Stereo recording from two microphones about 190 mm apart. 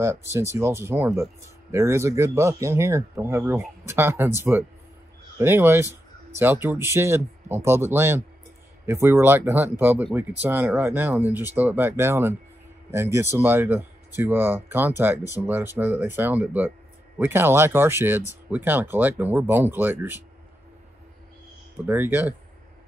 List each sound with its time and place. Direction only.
0.0 s speech: 15° right (ahead or behind)
21.7 s speech: 10° right (ahead or behind)